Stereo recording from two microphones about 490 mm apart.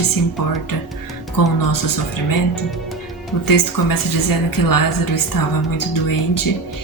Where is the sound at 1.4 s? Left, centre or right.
Left.